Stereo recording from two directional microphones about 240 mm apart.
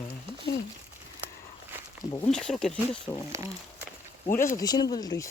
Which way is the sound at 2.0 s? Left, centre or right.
Centre.